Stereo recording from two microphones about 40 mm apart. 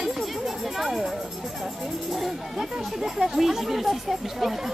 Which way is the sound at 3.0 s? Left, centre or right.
Centre.